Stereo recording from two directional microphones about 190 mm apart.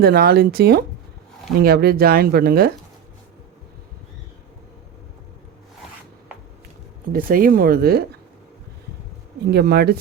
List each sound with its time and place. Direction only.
0.0 s speech: 55° right (ahead or behind)
7.1 s speech: 50° right (ahead or behind)
9.5 s speech: 55° right (ahead or behind)